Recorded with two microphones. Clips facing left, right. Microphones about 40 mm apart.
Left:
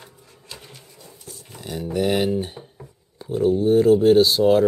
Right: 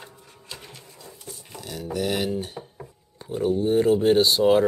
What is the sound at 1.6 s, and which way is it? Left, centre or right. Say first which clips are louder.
Speech: left 5 dB; centre.